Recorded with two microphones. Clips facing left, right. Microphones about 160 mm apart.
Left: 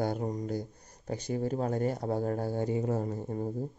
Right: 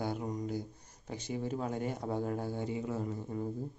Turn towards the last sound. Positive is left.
turn(degrees=40)  # may be behind; listen again after turning